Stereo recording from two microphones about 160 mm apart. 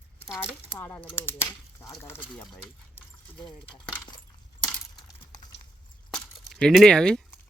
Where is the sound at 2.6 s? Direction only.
15° left (ahead or behind).